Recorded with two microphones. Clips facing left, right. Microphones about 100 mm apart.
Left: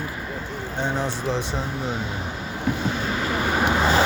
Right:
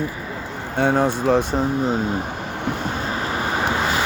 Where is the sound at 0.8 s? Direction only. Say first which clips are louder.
Right 8 dB; 55° right (ahead or behind).